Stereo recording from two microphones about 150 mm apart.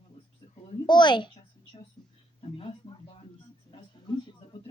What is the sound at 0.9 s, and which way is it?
Speech, 30° left (ahead or behind).